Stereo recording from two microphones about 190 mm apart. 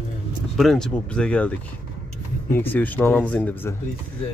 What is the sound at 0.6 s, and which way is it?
Speech, centre (ahead or behind).